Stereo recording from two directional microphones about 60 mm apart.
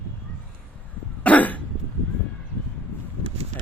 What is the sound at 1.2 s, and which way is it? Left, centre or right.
Cough, left.